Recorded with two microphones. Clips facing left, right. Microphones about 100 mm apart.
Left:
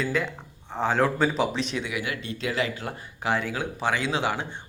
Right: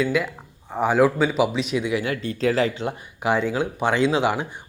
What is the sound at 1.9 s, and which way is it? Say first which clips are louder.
Speech: right 7 dB; 35° right (ahead or behind).